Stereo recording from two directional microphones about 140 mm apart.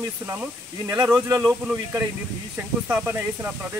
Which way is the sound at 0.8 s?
15° right (ahead or behind).